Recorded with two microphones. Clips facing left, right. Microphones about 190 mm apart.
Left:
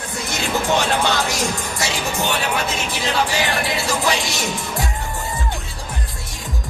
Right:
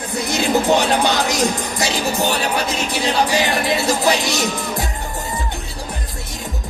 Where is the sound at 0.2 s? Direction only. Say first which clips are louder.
Right 6 dB; 35° right (ahead or behind).